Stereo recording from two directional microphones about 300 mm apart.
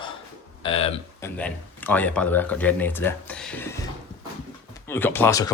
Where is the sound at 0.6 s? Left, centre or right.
Centre.